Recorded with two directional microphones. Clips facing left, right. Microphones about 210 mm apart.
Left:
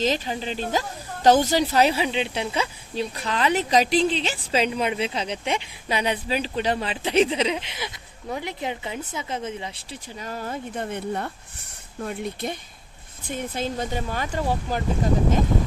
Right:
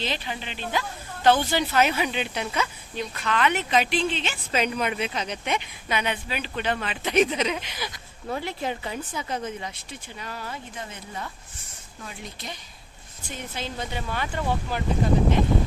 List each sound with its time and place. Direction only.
0.0 s speech: 40° left (ahead or behind)